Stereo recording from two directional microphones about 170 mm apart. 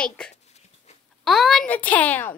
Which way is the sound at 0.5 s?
40° left (ahead or behind).